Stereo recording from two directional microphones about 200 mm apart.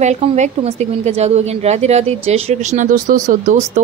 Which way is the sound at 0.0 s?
35° right (ahead or behind).